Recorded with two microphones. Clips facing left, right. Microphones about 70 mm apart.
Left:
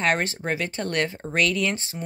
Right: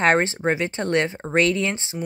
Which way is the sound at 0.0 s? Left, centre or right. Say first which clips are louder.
Right 5 dB; right.